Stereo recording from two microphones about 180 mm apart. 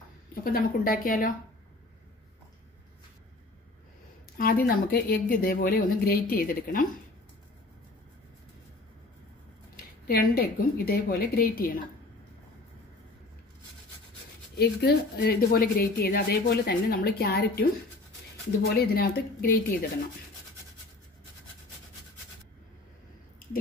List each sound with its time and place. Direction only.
0.3 s speech: 55° left (ahead or behind)
4.4 s a woman's voice: 55° left (ahead or behind)
10.0 s a woman's voice: 55° left (ahead or behind)
14.6 s a woman's voice: 65° left (ahead or behind)